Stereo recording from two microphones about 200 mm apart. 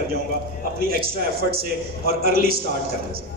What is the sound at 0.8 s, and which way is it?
A man's voice, 50° right (ahead or behind).